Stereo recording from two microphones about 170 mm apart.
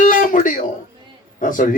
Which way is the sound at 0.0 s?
55° left (ahead or behind).